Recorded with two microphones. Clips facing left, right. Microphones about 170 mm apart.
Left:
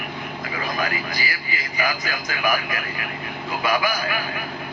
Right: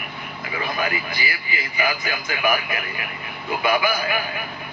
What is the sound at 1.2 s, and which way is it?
A man's voice, 40° left (ahead or behind).